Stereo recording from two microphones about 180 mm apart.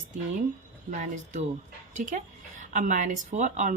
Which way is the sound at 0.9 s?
45° right (ahead or behind).